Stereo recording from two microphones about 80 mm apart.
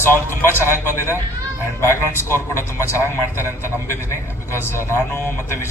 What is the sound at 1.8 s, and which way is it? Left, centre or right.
Speech, left.